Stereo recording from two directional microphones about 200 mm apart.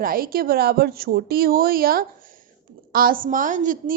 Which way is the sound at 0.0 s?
45° right (ahead or behind).